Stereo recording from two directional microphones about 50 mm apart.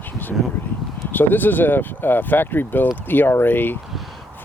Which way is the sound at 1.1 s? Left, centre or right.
Left.